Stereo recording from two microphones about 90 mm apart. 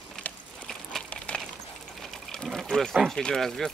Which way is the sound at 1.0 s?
15° left (ahead or behind).